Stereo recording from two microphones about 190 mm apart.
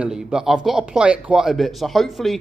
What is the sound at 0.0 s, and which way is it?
Speech, 5° right (ahead or behind).